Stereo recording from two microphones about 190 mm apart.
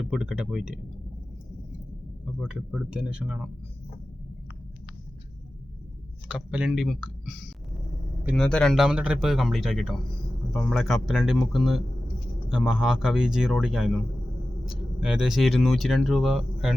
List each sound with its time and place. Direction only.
0.1 s speech: 5° right (ahead or behind)
2.4 s speech: centre (ahead or behind)
6.2 s speech: 5° right (ahead or behind)
8.4 s speech: 5° left (ahead or behind)